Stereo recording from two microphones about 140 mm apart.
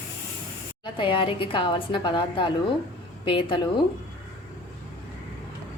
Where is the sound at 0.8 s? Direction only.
35° left (ahead or behind).